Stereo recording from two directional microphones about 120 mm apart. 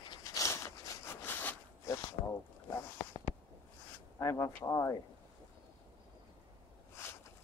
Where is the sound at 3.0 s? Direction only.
40° left (ahead or behind).